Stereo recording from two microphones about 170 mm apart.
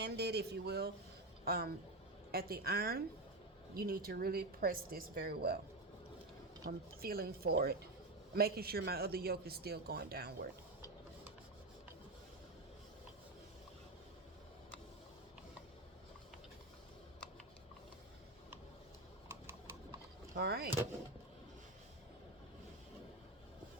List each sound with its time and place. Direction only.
0.0 s a man's voice: 75° right (ahead or behind)
6.7 s a man's voice: 65° right (ahead or behind)
19.3 s a sound: 15° right (ahead or behind)
20.3 s speech: 65° right (ahead or behind)